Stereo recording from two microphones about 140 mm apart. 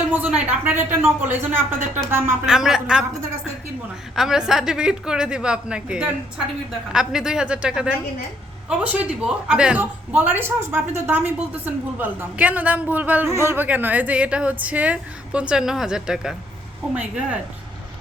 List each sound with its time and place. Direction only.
0.1 s speech: 10° right (ahead or behind)
2.5 s a woman's voice: 5° right (ahead or behind)
4.1 s a woman's voice: 5° right (ahead or behind)